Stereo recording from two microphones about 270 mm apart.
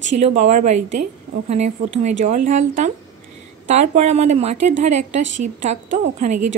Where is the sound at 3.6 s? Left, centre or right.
Right.